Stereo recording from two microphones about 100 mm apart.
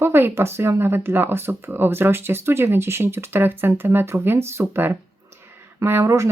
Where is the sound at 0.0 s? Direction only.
25° right (ahead or behind).